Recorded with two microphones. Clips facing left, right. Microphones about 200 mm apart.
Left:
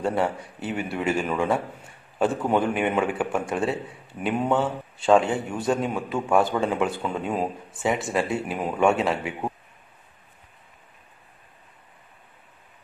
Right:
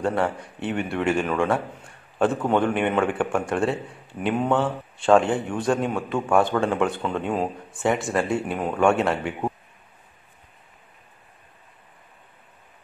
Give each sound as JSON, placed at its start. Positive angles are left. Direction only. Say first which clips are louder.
{"t": 0.0, "sound": "a man's voice", "louder": "right 1 dB", "side_deg": 5}